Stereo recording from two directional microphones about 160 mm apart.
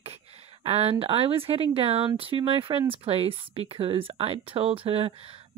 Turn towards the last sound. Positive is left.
turn(degrees=-35)  # may be behind; listen again after turning